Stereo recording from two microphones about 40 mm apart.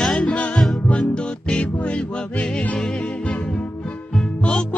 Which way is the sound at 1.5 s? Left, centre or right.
Left.